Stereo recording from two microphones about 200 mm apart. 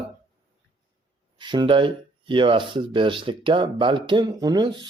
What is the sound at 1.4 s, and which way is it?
Speech, 25° right (ahead or behind).